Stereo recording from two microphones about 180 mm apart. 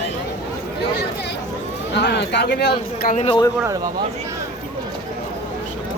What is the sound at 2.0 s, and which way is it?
Speech, 70° left (ahead or behind).